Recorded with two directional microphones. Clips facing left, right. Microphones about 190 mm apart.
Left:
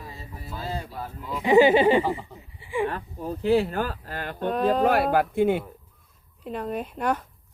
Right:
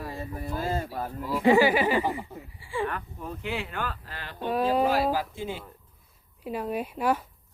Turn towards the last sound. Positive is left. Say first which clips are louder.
# even
turn(degrees=-5)  # may be behind; listen again after turning